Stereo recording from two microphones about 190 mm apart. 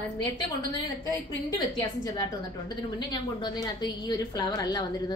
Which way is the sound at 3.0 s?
20° left (ahead or behind).